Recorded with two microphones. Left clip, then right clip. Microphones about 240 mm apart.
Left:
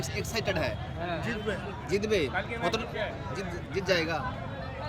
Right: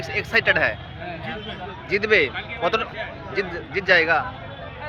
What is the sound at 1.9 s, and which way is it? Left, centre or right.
A man's voice, centre.